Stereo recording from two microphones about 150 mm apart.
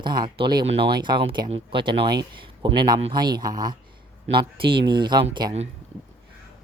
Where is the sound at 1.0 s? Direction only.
30° right (ahead or behind).